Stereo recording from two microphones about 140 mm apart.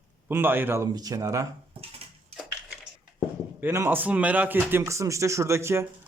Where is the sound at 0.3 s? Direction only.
15° right (ahead or behind).